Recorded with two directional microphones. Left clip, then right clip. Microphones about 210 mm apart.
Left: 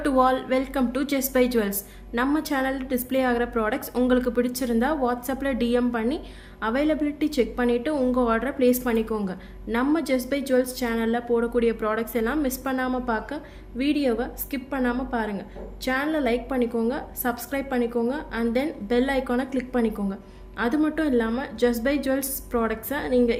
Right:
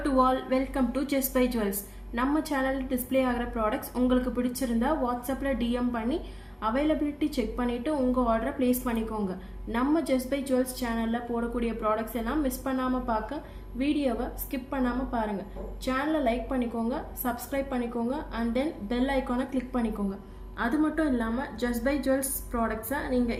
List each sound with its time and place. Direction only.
0.0 s a woman's voice: 45° left (ahead or behind)